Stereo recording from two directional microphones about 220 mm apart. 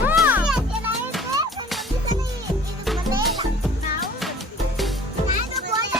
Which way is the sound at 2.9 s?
Centre (ahead or behind).